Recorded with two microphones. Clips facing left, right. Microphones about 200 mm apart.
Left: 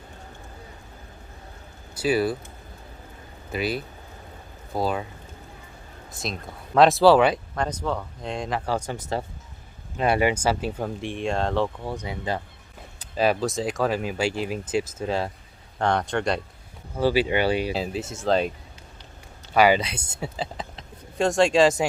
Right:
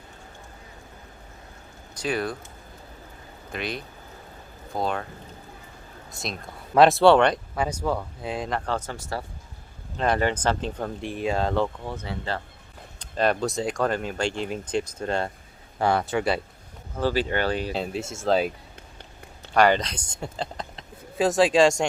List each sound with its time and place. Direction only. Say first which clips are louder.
2.0 s speech: left 5 dB; 5° left (ahead or behind)
3.5 s speech: left 5 dB; 5° left (ahead or behind)
6.1 s speech: left 2 dB; centre (ahead or behind)
7.5 s speech: right 1 dB; 10° right (ahead or behind); by 9.2 s 20° left (ahead or behind)
10.0 s speech: left 2 dB; 10° left (ahead or behind)
11.8 s speech: left 2 dB; 15° left (ahead or behind); by 16.4 s 5° right (ahead or behind)
17.0 s speech: left 3 dB; 10° left (ahead or behind)
19.5 s speech: left 1 dB; 5° left (ahead or behind)